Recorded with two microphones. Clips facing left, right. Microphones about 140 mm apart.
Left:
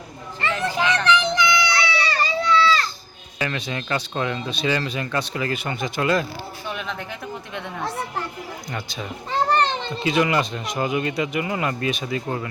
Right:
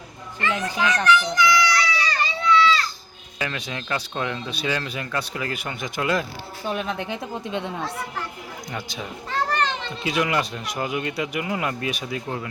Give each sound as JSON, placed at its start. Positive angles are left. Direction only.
{"t": 0.6, "sound": "a child's voice", "side_deg": 25}
{"t": 1.0, "sound": "a sound", "side_deg": 25}
{"t": 3.3, "sound": "speech", "side_deg": 0}
{"t": 6.7, "sound": "speech", "side_deg": -40}
{"t": 7.1, "sound": "speech", "side_deg": -20}
{"t": 9.3, "sound": "children playing", "side_deg": 35}
{"t": 10.0, "sound": "speech", "side_deg": -5}